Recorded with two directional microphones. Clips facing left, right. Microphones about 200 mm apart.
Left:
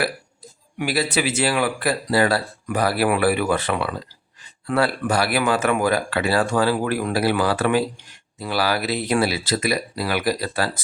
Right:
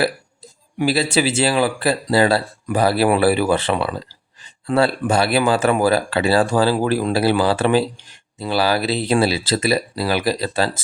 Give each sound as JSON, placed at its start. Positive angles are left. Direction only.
{"t": 0.8, "sound": "speech", "side_deg": -30}